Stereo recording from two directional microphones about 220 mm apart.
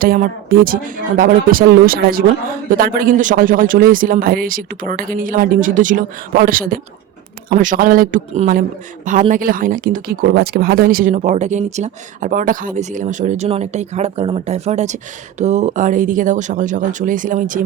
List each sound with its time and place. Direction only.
0.0 s speech: 40° right (ahead or behind)